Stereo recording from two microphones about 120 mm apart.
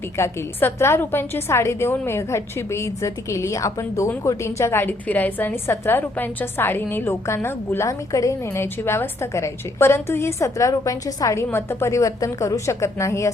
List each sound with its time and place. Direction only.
0.2 s a woman's voice: 20° left (ahead or behind)